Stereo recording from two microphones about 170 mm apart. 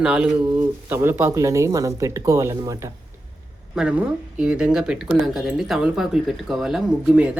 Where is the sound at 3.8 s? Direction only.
5° right (ahead or behind).